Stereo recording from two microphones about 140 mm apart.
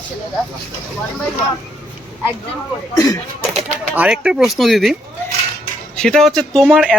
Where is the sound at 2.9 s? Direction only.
20° left (ahead or behind).